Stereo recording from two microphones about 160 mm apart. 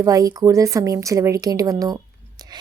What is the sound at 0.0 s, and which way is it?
A woman's voice, 20° right (ahead or behind).